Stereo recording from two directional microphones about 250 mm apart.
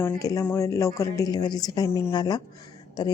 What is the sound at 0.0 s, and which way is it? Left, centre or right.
Speech, centre.